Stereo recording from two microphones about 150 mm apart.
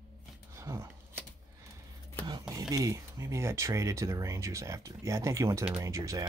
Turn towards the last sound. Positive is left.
turn(degrees=-20)  # may be behind; listen again after turning